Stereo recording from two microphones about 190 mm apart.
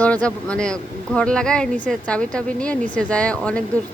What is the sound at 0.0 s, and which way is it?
Speech, 5° left (ahead or behind).